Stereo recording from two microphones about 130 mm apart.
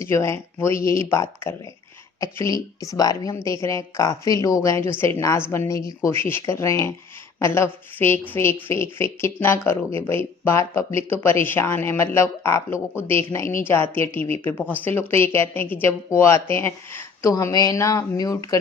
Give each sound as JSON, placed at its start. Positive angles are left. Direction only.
{"t": 0.0, "sound": "a woman's voice", "side_deg": 20}